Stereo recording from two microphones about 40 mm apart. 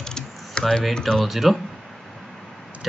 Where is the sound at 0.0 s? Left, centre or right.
Centre.